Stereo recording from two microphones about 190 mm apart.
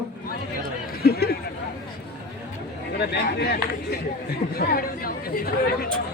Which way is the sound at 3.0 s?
60° left (ahead or behind).